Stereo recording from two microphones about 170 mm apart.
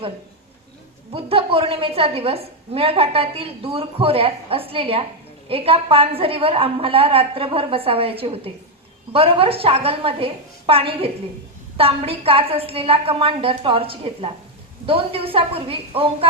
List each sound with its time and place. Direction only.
1.1 s a woman's voice: 35° right (ahead or behind)